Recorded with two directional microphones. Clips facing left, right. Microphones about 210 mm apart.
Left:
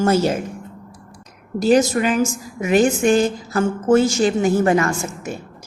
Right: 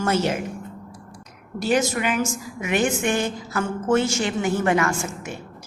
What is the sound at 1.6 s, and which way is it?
A woman's voice, 40° left (ahead or behind).